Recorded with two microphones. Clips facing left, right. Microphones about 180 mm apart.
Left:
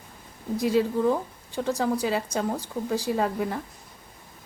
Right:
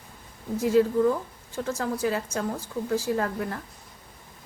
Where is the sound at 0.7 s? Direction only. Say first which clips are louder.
Right 3 dB; 15° left (ahead or behind).